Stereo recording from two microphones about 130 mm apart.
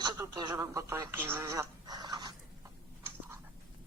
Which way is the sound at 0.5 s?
25° right (ahead or behind).